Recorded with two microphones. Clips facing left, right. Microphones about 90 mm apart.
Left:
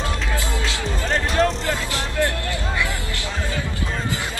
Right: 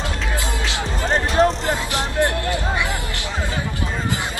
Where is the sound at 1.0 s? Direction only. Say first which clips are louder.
Right 3 dB; 35° right (ahead or behind).